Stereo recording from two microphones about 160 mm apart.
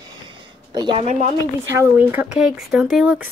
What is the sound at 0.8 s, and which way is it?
Speech, 30° right (ahead or behind).